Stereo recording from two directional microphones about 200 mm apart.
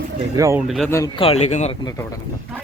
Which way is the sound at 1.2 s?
30° left (ahead or behind).